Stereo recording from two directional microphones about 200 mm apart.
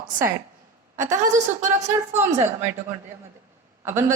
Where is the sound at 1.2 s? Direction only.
35° right (ahead or behind).